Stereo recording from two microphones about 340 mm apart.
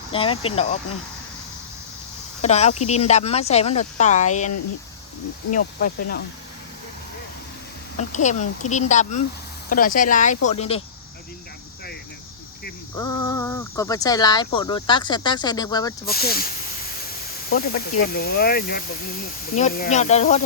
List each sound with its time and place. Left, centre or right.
0.1 s speech: centre
2.4 s speech: centre
8.1 s speech: left
13.0 s speech: centre
16.0 s speech: left
17.5 s speech: left